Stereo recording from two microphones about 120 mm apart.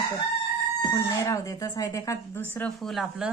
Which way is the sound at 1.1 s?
25° left (ahead or behind).